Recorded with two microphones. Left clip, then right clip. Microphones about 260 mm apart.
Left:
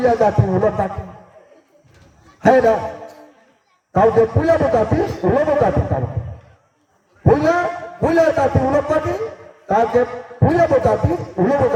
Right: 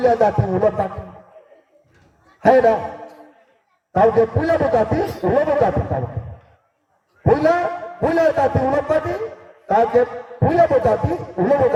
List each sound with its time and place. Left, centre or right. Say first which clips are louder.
0.0 s a man's voice: left 1 dB; right
2.5 s a man's voice: even; right
3.9 s a man's voice: left 1 dB; right
7.5 s a man's voice: left 1 dB; right